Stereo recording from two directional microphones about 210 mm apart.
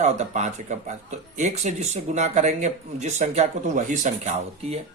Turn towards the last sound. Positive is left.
turn(degrees=-35)  # may be behind; listen again after turning